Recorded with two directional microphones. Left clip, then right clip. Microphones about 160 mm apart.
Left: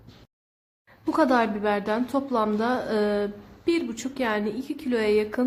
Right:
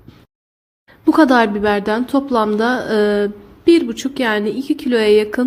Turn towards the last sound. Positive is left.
turn(degrees=-20)  # may be behind; listen again after turning